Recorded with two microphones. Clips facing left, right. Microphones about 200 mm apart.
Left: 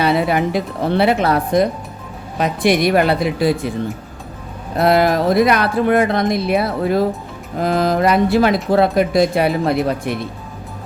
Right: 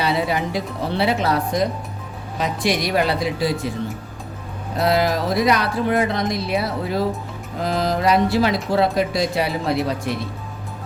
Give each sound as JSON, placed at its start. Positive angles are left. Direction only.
{"t": 0.0, "sound": "speech", "side_deg": 55}
{"t": 4.8, "sound": "speech", "side_deg": 55}